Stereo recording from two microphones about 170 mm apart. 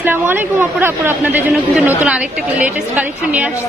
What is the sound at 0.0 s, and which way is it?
A woman's voice, 10° right (ahead or behind).